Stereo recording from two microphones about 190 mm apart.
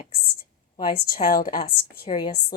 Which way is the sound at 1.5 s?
25° left (ahead or behind).